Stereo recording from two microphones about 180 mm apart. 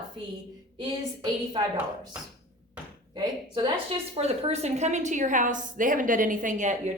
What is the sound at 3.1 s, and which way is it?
A woman's voice, 25° right (ahead or behind).